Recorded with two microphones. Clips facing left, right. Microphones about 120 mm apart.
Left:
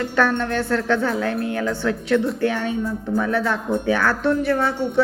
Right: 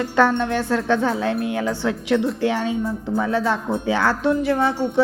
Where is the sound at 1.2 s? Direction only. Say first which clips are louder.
Right 1 dB; 20° right (ahead or behind).